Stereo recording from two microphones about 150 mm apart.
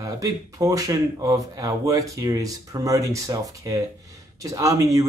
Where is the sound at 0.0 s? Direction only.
25° right (ahead or behind).